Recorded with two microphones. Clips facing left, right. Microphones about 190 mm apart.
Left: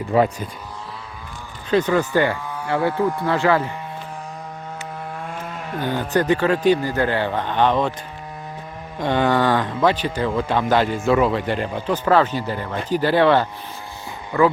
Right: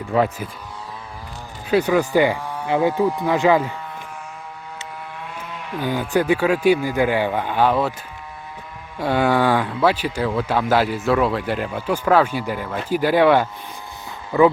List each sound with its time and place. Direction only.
0.1 s speech: centre (ahead or behind)
1.7 s a man's voice: 10° right (ahead or behind)
5.2 s a sound: 45° left (ahead or behind)
5.8 s a man's voice: 10° right (ahead or behind)
9.0 s a man's voice: 5° right (ahead or behind)